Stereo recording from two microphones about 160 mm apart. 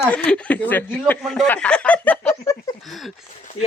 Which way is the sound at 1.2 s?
Centre (ahead or behind).